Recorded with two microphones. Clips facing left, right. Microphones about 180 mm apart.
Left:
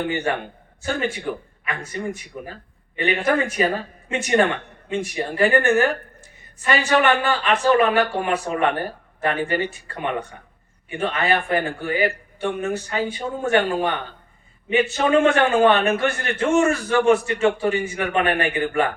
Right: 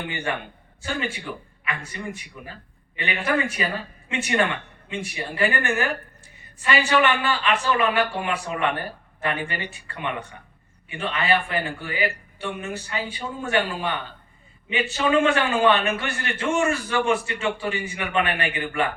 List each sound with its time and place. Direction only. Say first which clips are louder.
0.0 s a man's voice: left 6 dB; 40° left (ahead or behind)
6.9 s a man's voice: left 4 dB; 40° left (ahead or behind)